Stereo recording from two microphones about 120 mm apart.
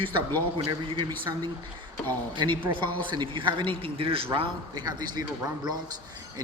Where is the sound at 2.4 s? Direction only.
40° right (ahead or behind).